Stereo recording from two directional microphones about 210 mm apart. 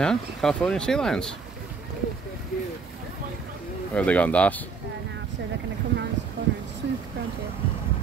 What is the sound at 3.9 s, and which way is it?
Speech, 5° left (ahead or behind).